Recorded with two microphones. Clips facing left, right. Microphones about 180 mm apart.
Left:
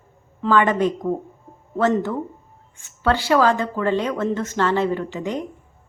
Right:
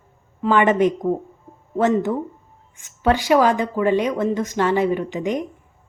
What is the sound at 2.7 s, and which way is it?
A woman's voice, 15° right (ahead or behind).